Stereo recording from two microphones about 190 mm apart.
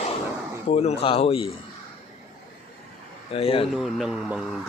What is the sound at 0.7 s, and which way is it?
Speech, 35° left (ahead or behind).